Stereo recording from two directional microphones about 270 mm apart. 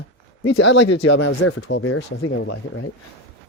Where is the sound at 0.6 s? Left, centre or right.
Left.